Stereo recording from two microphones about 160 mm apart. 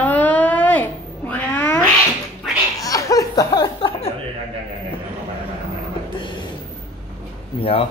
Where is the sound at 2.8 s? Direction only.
20° left (ahead or behind).